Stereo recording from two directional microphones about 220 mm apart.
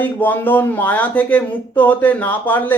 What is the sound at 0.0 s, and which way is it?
Speech, 10° left (ahead or behind).